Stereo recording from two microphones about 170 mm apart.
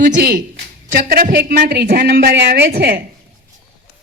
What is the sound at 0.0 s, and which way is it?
A woman's voice, 65° right (ahead or behind).